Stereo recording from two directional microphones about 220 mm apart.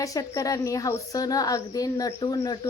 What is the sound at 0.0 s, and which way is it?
A woman's voice, 15° left (ahead or behind).